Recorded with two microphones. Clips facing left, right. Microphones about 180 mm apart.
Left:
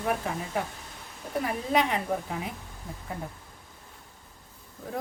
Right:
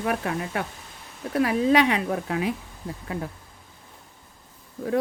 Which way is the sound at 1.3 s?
90° right.